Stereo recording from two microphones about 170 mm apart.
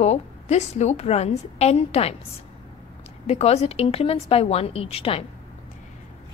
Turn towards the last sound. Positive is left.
turn(degrees=35)  # may be behind; listen again after turning